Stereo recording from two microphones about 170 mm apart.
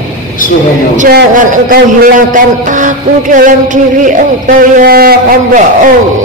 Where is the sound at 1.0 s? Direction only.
55° right (ahead or behind).